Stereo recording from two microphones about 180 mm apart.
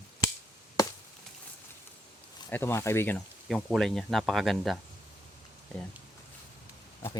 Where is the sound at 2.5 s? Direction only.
15° left (ahead or behind).